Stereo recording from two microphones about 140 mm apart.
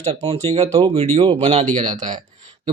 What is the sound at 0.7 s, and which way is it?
Speech, 25° right (ahead or behind).